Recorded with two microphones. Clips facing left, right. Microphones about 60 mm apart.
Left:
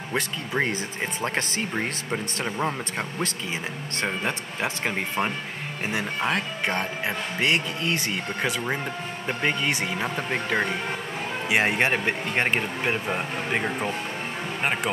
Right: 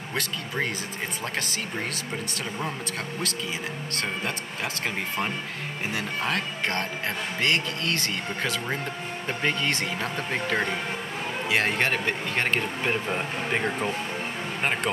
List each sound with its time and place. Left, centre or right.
0.1 s speech: left
4.8 s speech: centre